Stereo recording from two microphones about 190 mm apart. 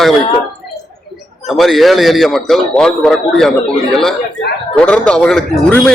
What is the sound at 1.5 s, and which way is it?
Speech, centre (ahead or behind).